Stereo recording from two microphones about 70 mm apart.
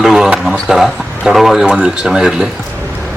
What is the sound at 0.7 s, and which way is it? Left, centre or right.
Speech, centre.